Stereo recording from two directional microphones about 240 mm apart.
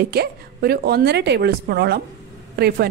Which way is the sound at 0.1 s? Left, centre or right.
Right.